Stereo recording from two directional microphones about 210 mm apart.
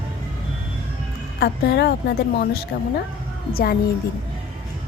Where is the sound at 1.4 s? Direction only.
55° left (ahead or behind).